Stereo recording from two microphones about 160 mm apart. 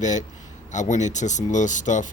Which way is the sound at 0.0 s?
50° left (ahead or behind).